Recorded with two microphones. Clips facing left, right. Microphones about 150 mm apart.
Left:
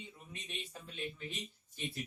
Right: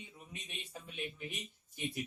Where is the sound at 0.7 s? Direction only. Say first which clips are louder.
Right 3 dB; 15° right (ahead or behind).